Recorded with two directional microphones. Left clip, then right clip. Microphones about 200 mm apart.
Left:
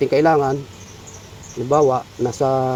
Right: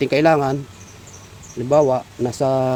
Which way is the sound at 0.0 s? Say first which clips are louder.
Even; 35° right (ahead or behind).